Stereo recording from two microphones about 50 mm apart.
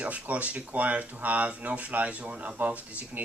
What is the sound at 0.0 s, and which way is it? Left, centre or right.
Speech, right.